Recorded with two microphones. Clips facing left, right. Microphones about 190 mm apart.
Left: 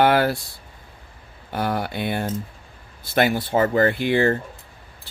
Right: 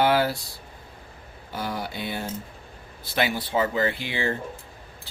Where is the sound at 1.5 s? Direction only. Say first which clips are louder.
Left 6 dB; 60° left (ahead or behind).